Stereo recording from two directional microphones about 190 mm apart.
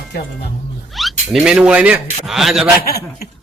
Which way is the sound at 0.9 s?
Centre (ahead or behind).